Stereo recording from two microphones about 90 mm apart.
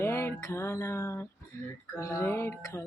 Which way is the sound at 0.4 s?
30° left (ahead or behind).